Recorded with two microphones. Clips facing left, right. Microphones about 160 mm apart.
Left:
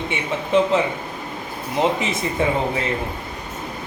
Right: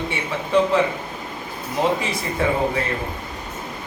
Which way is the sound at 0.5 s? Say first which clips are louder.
Left 1 dB; 20° left (ahead or behind).